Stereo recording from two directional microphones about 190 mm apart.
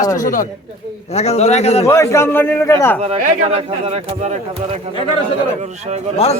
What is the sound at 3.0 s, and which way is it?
Speech, 35° right (ahead or behind).